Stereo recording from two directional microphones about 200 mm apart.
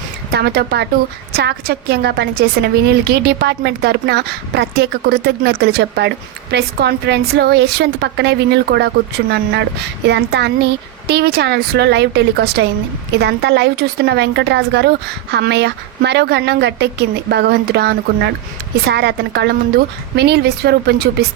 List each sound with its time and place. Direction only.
0.3 s a woman's voice: 55° right (ahead or behind)